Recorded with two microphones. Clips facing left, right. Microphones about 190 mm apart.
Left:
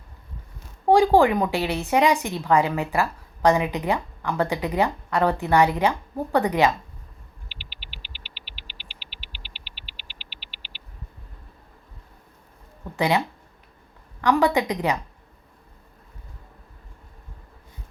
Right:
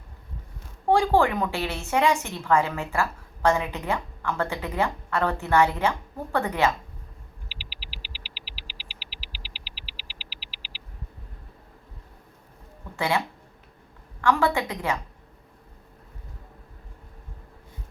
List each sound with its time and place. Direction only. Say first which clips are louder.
0.9 s a woman's voice: left 4 dB; 15° left (ahead or behind)
7.4 s hum: right 1 dB; centre (ahead or behind)
13.0 s a woman's voice: left 4 dB; 20° left (ahead or behind)